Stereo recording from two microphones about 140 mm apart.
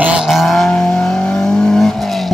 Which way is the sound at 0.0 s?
5° right (ahead or behind).